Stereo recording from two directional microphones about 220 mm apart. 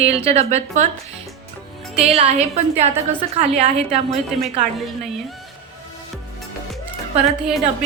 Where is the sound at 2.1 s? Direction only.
30° right (ahead or behind).